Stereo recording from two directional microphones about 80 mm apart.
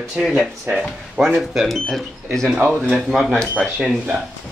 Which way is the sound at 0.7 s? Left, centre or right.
Right.